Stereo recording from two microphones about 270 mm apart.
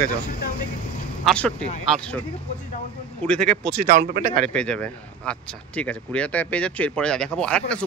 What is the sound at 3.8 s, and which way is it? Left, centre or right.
Speech, right.